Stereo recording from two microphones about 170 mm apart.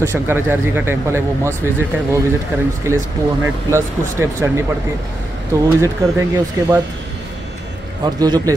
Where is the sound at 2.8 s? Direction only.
15° right (ahead or behind).